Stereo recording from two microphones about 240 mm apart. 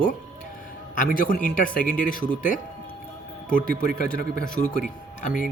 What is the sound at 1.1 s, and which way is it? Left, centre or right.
Speech, left.